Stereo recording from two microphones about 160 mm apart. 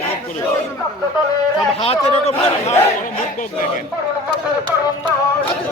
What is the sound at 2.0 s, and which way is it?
Speech, 40° left (ahead or behind).